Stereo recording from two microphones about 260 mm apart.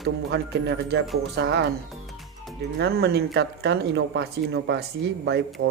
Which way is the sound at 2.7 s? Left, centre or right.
Right.